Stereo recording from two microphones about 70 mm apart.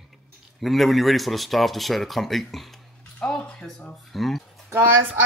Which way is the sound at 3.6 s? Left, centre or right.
Centre.